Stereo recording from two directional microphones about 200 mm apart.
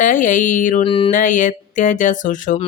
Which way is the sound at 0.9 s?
25° left (ahead or behind).